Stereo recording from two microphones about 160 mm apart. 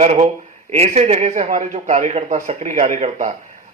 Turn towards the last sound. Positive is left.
turn(degrees=-45)  # may be behind; listen again after turning